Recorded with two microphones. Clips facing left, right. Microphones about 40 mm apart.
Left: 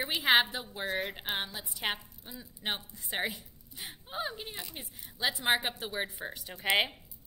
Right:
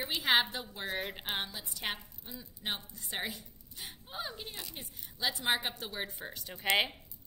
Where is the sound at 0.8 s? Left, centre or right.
Centre.